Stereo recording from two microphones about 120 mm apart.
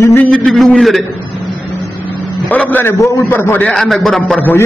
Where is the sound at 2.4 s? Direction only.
15° left (ahead or behind).